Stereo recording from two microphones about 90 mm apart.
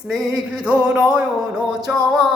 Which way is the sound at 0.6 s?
15° right (ahead or behind).